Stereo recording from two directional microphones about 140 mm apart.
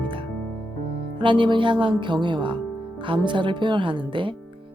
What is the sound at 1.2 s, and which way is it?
Speech, 35° right (ahead or behind).